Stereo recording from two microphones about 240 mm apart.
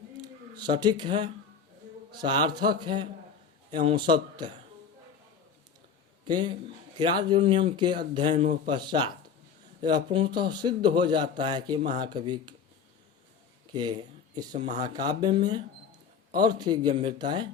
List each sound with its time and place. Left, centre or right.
0.2 s a man's voice: centre
6.2 s a man's voice: centre
8.3 s a man's voice: right
8.6 s a man's voice: centre
13.7 s speech: centre
16.4 s a man's voice: centre